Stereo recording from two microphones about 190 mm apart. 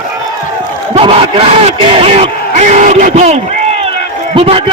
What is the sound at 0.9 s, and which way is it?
Speech, 30° right (ahead or behind).